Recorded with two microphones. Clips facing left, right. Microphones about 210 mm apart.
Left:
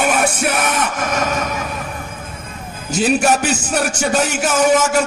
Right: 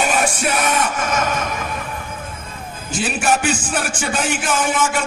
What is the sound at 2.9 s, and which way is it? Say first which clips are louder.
Speech: left 5 dB; 40° left (ahead or behind).